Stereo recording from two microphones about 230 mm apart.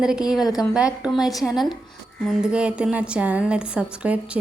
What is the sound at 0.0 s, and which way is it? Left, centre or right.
Speech, centre.